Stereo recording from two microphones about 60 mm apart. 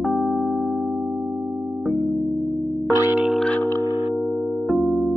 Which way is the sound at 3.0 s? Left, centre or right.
Right.